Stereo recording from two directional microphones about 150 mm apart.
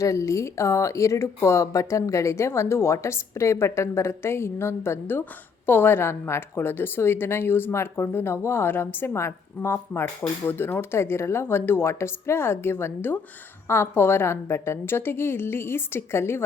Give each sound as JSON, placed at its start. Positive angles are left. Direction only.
{"t": 0.0, "sound": "a woman's voice", "side_deg": 20}